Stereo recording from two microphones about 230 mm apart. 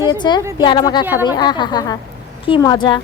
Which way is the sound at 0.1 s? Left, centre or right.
Centre.